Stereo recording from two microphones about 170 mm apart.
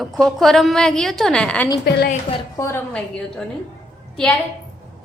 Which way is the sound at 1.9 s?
70° left (ahead or behind).